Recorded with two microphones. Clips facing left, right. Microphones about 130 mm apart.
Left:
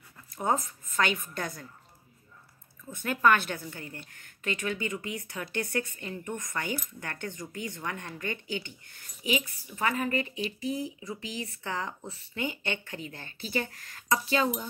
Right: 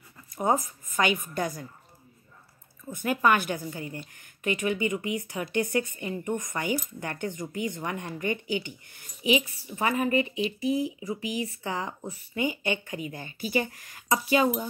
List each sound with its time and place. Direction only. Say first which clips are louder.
0.4 s speech: right 3 dB; 15° right (ahead or behind)
3.0 s speech: right 1 dB; 15° right (ahead or behind)